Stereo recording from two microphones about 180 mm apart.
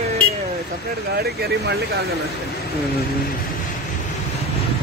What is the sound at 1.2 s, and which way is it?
Speech, 60° right (ahead or behind).